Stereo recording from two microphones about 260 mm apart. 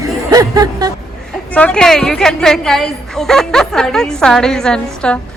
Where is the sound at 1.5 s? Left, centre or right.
Centre.